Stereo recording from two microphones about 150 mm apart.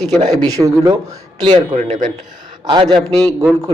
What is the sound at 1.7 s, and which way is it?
Speech, 50° right (ahead or behind).